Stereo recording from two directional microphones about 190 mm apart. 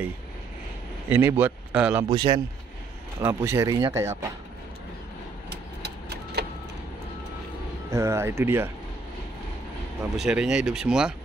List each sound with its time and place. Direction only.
1.1 s speech: 10° right (ahead or behind)
2.0 s speech: 25° right (ahead or behind)
3.2 s speech: 10° right (ahead or behind)
5.5 s a sound: 60° right (ahead or behind)
7.9 s speech: 15° right (ahead or behind)
10.1 s speech: 5° right (ahead or behind)